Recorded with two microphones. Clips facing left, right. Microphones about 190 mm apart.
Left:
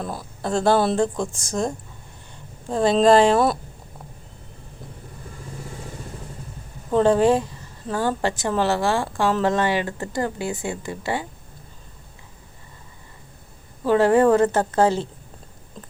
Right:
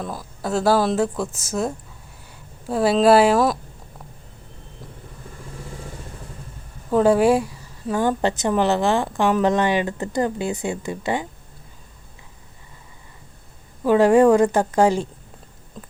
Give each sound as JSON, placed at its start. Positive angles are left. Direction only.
{"t": 0.4, "sound": "a woman's voice", "side_deg": -5}
{"t": 6.9, "sound": "a woman's voice", "side_deg": -10}
{"t": 13.8, "sound": "a woman's voice", "side_deg": -15}
{"t": 15.8, "sound": "a sound", "side_deg": 0}